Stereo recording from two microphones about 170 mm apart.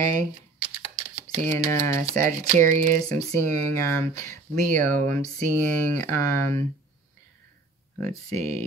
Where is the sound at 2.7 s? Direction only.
50° right (ahead or behind).